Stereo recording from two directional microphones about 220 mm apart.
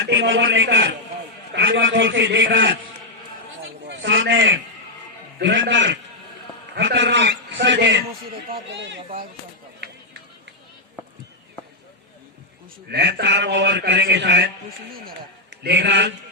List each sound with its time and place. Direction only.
0.0 s a man's voice: 55° right (ahead or behind)
3.6 s a sound: 55° right (ahead or behind)
5.4 s a man's voice: 55° right (ahead or behind)
12.9 s a man's voice: 50° right (ahead or behind)
15.6 s a man's voice: 50° right (ahead or behind)